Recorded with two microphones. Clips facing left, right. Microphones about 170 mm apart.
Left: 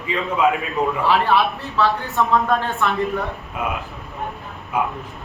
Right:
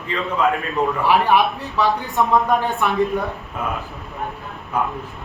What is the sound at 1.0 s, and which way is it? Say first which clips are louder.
Speech: right 2 dB; 15° right (ahead or behind).